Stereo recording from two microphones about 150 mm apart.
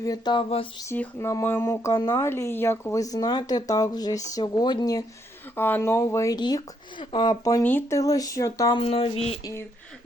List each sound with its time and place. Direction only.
0.0 s a sound: 25° left (ahead or behind)
0.9 s speech: 20° left (ahead or behind)
5.5 s speech: 15° left (ahead or behind)
7.6 s speech: 15° left (ahead or behind)
8.8 s a sound: 40° left (ahead or behind)
9.4 s speech: 20° left (ahead or behind)